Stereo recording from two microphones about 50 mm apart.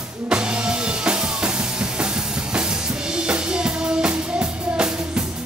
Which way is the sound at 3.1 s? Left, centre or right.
Centre.